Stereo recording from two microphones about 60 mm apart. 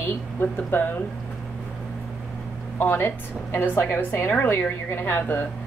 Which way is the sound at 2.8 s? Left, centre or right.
Left.